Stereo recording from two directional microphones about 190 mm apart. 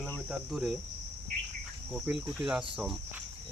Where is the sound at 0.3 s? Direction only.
5° right (ahead or behind).